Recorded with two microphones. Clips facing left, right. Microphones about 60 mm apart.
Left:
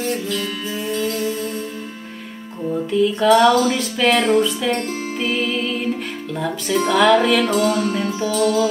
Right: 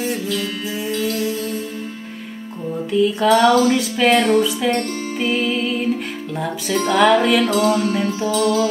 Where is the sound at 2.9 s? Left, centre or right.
Centre.